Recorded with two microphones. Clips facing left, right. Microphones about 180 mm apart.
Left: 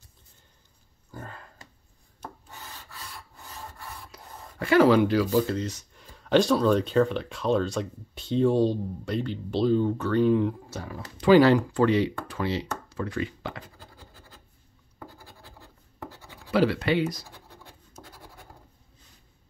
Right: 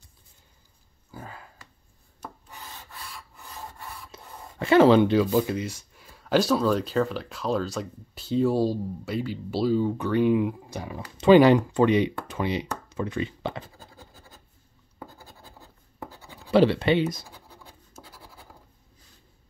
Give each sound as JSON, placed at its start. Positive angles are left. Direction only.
{"t": 1.1, "sound": "a sound", "side_deg": -5}
{"t": 4.1, "sound": "speech", "side_deg": -25}
{"t": 16.4, "sound": "speech", "side_deg": -25}